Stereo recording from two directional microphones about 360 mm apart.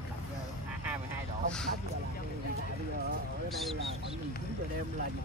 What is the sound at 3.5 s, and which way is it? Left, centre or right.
Speech, centre.